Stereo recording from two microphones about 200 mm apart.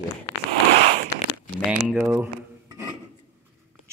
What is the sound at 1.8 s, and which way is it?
Speech, 10° right (ahead or behind).